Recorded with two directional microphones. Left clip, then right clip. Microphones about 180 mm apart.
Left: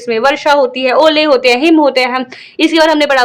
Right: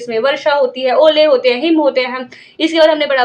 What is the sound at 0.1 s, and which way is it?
A woman's voice, 45° left (ahead or behind).